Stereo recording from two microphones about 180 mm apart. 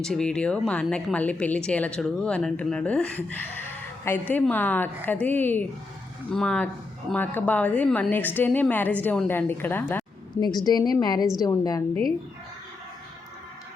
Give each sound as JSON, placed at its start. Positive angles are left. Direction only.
{"t": 0.0, "sound": "a woman's voice", "side_deg": 5}
{"t": 10.3, "sound": "a woman's voice", "side_deg": 25}